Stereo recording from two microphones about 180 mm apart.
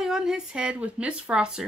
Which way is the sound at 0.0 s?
5° right (ahead or behind).